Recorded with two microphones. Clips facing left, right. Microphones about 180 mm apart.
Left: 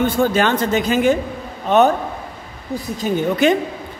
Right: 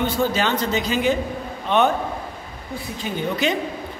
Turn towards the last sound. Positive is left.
turn(degrees=40)  # may be behind; listen again after turning